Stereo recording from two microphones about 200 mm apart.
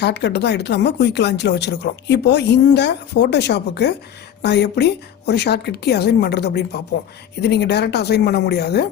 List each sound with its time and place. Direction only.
0.0 s speech: 55° left (ahead or behind)